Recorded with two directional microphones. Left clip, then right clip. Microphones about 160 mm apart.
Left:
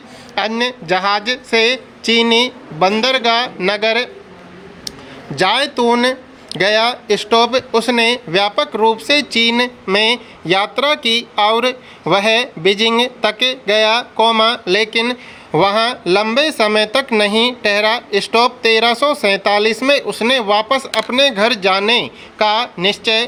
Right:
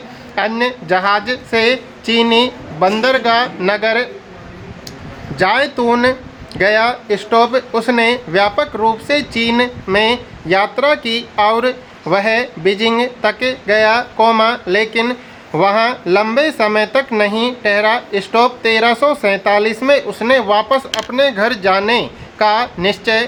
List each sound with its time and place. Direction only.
0.6 s speech: 30° left (ahead or behind)
5.4 s speech: 25° left (ahead or behind)